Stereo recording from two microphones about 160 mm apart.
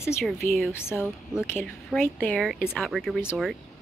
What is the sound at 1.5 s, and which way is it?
Speech, centre (ahead or behind).